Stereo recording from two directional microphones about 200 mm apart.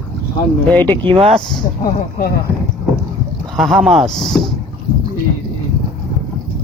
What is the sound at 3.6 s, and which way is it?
Speech, centre (ahead or behind).